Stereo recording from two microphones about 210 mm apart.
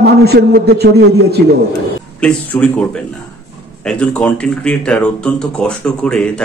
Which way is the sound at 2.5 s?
10° left (ahead or behind).